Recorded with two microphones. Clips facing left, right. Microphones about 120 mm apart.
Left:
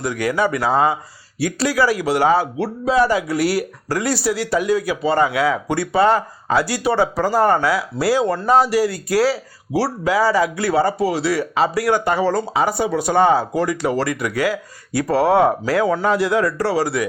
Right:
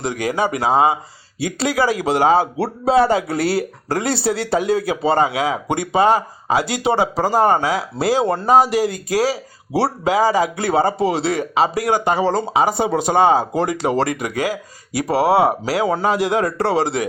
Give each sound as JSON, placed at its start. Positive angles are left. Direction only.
{"t": 0.0, "sound": "speech", "side_deg": -20}